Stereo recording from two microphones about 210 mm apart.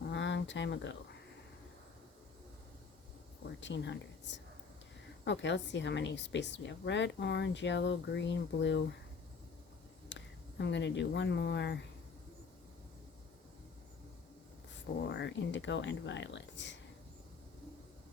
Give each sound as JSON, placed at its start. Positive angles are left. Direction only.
{"t": 0.1, "sound": "a sound", "side_deg": 60}
{"t": 3.6, "sound": "a woman's voice", "side_deg": 60}
{"t": 10.1, "sound": "speech", "side_deg": 55}
{"t": 15.1, "sound": "a woman's voice", "side_deg": 60}